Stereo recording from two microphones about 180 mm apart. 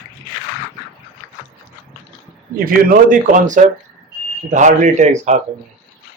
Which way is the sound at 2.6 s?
55° right (ahead or behind).